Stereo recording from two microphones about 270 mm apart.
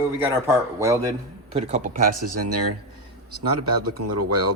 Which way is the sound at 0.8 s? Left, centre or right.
Centre.